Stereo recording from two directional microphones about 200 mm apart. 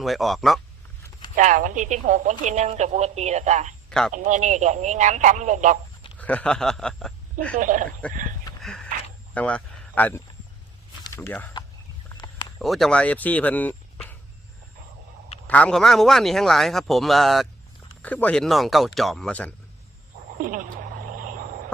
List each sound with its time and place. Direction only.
0.0 s a man's voice: centre (ahead or behind)
1.4 s speech: 40° right (ahead or behind)
3.8 s speech: 5° left (ahead or behind)
4.1 s speech: 40° right (ahead or behind)
6.1 s a man's voice: 5° left (ahead or behind)
7.5 s speech: 40° right (ahead or behind)
8.6 s a sound: 5° left (ahead or behind)
9.3 s speech: 5° left (ahead or behind)
12.0 s a sound: 20° left (ahead or behind)
12.5 s speech: centre (ahead or behind)
15.4 s a man's voice: 5° left (ahead or behind)
20.4 s a sound: 45° right (ahead or behind)